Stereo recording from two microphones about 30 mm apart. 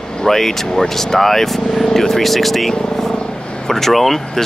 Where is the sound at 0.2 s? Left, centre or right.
Centre.